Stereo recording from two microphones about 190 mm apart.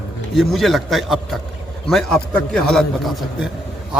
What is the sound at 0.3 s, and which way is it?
A man's voice, centre (ahead or behind).